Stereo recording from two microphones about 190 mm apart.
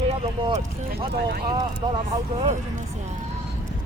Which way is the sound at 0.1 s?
35° right (ahead or behind).